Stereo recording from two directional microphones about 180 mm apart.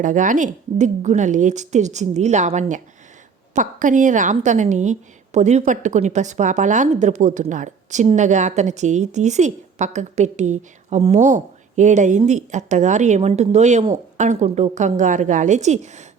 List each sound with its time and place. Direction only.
0.0 s a woman's voice: 45° right (ahead or behind)